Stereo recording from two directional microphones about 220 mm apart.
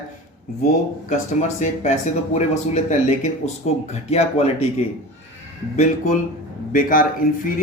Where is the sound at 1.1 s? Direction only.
30° left (ahead or behind).